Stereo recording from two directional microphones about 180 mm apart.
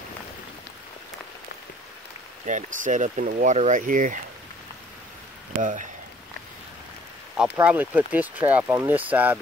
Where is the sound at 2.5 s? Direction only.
45° right (ahead or behind).